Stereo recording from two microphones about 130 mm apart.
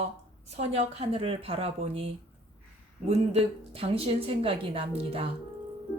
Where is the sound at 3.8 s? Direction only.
45° right (ahead or behind).